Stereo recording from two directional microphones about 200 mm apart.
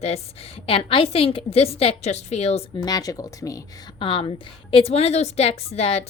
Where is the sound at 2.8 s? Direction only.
20° left (ahead or behind).